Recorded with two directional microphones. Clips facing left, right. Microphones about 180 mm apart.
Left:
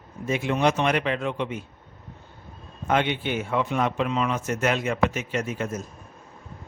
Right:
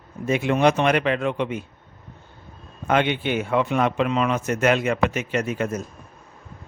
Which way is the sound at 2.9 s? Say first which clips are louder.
Right 3 dB; 70° right (ahead or behind).